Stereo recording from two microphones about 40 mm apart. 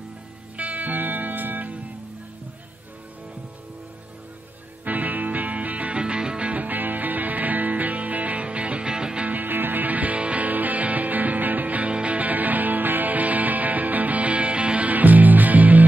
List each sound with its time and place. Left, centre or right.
0.6 s music: right
4.8 s music: right
5.9 s music: right
6.5 s music: right
9.2 s music: right